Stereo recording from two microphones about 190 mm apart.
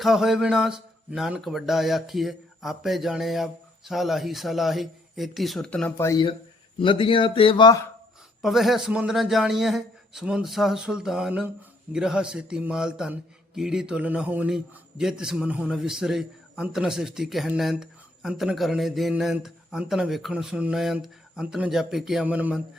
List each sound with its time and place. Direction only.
0.0 s a man's voice: centre (ahead or behind)
6.1 s speech: 20° left (ahead or behind)
8.4 s a man's voice: centre (ahead or behind)